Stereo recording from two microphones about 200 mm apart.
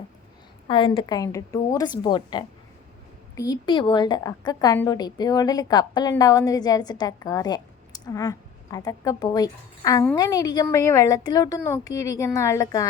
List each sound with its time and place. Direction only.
0.7 s a woman's voice: 25° left (ahead or behind)